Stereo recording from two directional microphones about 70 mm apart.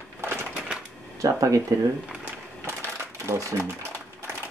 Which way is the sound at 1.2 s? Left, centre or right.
Right.